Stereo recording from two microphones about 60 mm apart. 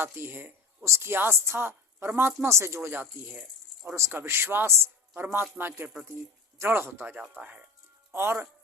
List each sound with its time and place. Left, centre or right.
0.0 s a woman's voice: right
2.9 s a man's voice: right
3.9 s a woman's voice: right
5.2 s a man's voice: right
8.1 s a man's voice: right